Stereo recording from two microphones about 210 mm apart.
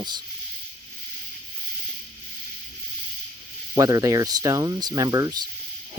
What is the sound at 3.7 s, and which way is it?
Speech, 15° right (ahead or behind).